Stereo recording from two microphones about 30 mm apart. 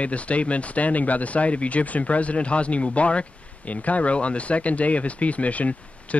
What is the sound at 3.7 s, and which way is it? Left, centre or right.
Speech, left.